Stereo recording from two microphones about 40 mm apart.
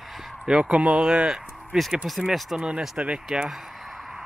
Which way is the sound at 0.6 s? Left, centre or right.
Right.